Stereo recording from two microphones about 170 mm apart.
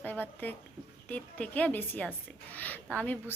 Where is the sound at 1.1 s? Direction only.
10° left (ahead or behind).